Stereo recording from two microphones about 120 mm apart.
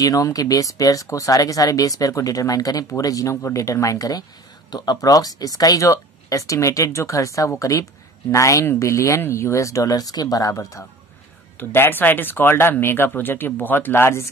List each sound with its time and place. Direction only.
0.0 s speech: 30° left (ahead or behind)